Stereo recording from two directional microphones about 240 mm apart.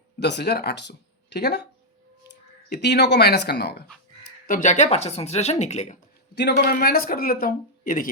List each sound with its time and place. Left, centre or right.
0.2 s speech: left
4.4 s speech: left
6.3 s speech: left